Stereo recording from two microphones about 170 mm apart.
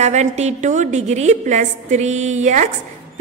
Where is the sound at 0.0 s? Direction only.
40° right (ahead or behind).